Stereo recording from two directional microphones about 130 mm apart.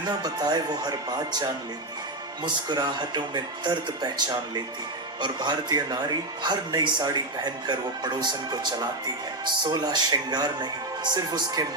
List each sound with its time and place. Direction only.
0.1 s speech: 30° right (ahead or behind)